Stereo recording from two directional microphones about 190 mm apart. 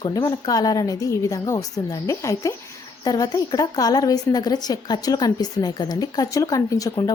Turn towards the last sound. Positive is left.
turn(degrees=20)  # may be behind; listen again after turning